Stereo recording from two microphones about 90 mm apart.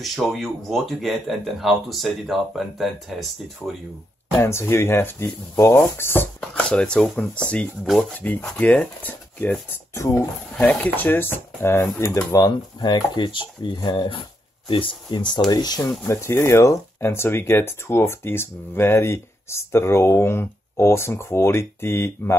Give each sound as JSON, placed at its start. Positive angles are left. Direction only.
{"t": 0.0, "sound": "speech", "side_deg": 0}
{"t": 4.4, "sound": "speech", "side_deg": 30}
{"t": 6.7, "sound": "speech", "side_deg": 10}
{"t": 7.8, "sound": "speech", "side_deg": 0}
{"t": 8.1, "sound": "speech", "side_deg": 15}
{"t": 9.9, "sound": "speech", "side_deg": 30}
{"t": 10.6, "sound": "speech", "side_deg": 15}
{"t": 12.3, "sound": "speech", "side_deg": 45}
{"t": 14.7, "sound": "speech", "side_deg": 70}
{"t": 16.1, "sound": "speech", "side_deg": 30}